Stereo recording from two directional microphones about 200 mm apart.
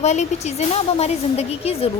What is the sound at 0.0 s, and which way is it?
A woman's voice, 35° left (ahead or behind).